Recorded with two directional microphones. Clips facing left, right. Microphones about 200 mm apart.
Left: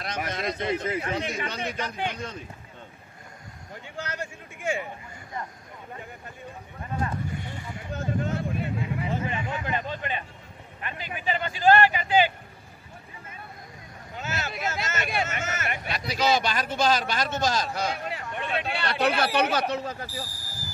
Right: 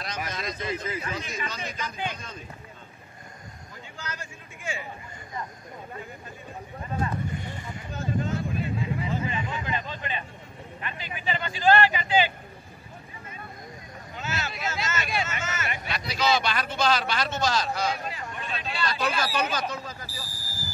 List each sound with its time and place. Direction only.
0.0 s speech: 60° left (ahead or behind)
3.9 s speech: 65° left (ahead or behind)
7.9 s speech: 60° left (ahead or behind)
14.2 s speech: 50° left (ahead or behind)